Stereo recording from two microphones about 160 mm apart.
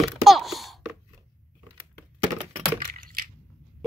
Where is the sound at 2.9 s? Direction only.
65° right (ahead or behind).